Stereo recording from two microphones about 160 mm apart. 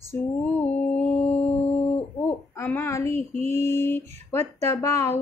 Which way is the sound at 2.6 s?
15° left (ahead or behind).